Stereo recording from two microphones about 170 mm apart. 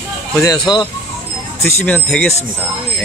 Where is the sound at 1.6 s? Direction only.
5° left (ahead or behind).